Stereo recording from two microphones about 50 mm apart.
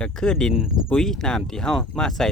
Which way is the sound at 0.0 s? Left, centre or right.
Centre.